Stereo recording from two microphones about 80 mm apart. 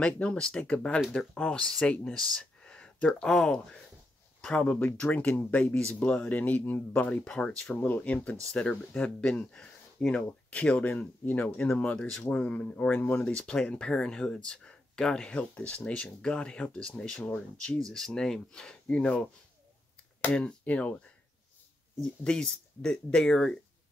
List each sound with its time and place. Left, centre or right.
0.0 s speech: centre
7.7 s speech: left
10.9 s speech: left
22.2 s speech: centre